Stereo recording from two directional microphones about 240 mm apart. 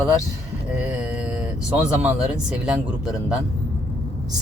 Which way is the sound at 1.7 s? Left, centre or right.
Centre.